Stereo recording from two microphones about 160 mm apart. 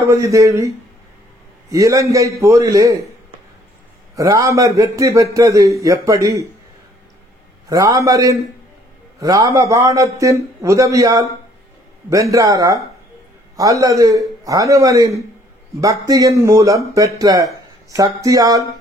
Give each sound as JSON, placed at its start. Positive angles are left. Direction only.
{"t": 0.0, "sound": "speech", "side_deg": -20}
{"t": 1.7, "sound": "speech", "side_deg": -20}
{"t": 4.1, "sound": "speech", "side_deg": -20}
{"t": 7.7, "sound": "speech", "side_deg": -20}